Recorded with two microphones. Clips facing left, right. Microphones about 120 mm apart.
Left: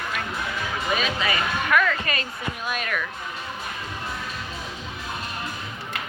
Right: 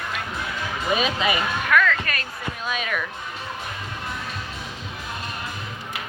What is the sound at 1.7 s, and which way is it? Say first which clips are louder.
Music: right 2 dB; 10° left (ahead or behind).